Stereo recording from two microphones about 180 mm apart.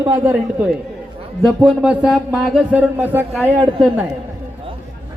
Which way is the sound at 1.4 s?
Centre (ahead or behind).